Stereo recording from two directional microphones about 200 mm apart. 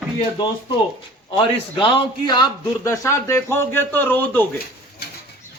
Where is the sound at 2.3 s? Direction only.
20° left (ahead or behind).